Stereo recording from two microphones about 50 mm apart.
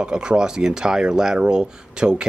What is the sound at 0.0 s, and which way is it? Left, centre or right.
Speech, centre.